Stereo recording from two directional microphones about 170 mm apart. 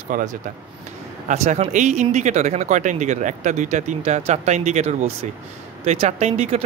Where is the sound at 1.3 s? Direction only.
45° right (ahead or behind).